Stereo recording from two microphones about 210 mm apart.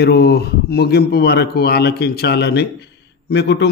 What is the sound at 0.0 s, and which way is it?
A man's voice, 50° left (ahead or behind).